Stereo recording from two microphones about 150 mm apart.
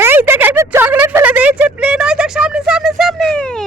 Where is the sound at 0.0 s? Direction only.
15° right (ahead or behind).